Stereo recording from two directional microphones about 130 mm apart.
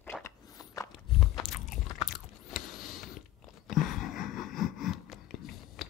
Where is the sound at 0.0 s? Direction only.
15° left (ahead or behind).